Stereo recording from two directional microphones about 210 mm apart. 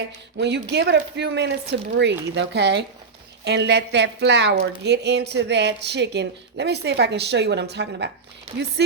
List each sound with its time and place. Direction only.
0.3 s speech: 55° right (ahead or behind)